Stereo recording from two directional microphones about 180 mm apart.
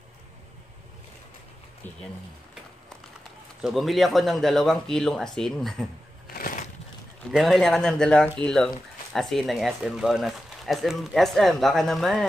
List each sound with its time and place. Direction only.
3.6 s speech: centre (ahead or behind)
6.3 s crushing: 50° left (ahead or behind)
7.2 s speech: centre (ahead or behind)